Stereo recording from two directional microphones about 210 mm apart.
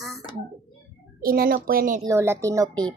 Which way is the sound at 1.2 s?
45° right (ahead or behind).